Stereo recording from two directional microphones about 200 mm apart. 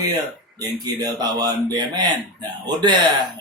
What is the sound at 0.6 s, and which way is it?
Speech, 20° right (ahead or behind).